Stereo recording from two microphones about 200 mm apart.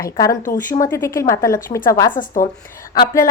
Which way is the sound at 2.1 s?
40° left (ahead or behind).